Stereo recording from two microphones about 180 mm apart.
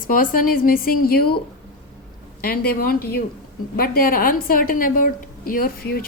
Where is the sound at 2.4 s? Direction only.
55° left (ahead or behind).